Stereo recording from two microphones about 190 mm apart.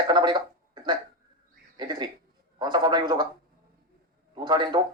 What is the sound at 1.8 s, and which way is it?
A man's voice, 25° right (ahead or behind).